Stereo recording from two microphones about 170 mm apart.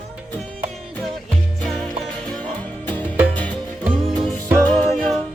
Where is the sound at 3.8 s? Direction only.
5° right (ahead or behind).